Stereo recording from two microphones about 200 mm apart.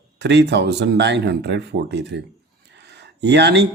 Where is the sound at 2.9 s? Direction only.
60° right (ahead or behind).